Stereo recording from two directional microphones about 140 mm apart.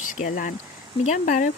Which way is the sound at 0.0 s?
70° left (ahead or behind).